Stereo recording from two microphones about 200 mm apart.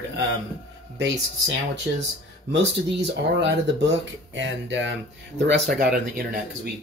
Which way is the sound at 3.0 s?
60° right (ahead or behind).